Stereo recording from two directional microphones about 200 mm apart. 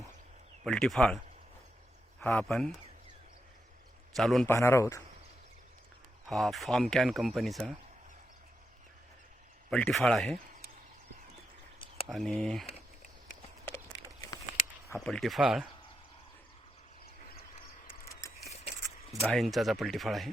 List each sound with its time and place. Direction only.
0.6 s speech: centre (ahead or behind)
2.2 s speech: 5° left (ahead or behind)
4.1 s speech: centre (ahead or behind)
4.4 s a man's voice: 15° left (ahead or behind)
6.2 s speech: centre (ahead or behind)
9.6 s speech: 5° left (ahead or behind)
12.0 s speech: centre (ahead or behind)
14.9 s speech: centre (ahead or behind)
17.5 s mechanisms: 45° left (ahead or behind)
19.3 s speech: centre (ahead or behind)